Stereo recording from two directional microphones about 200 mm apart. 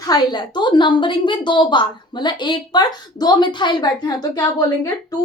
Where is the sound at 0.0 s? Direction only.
20° left (ahead or behind).